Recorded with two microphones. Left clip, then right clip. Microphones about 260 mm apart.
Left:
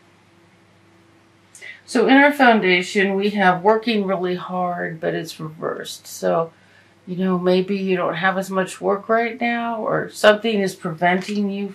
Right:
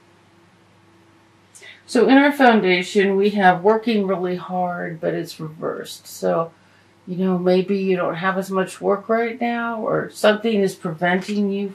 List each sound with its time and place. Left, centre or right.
1.9 s speech: centre
7.2 s speech: centre